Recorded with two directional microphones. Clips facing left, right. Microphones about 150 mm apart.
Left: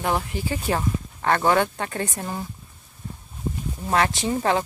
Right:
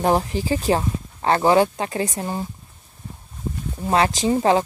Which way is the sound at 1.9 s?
15° right (ahead or behind).